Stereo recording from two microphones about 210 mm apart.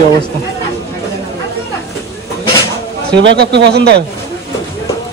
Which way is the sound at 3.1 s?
55° right (ahead or behind).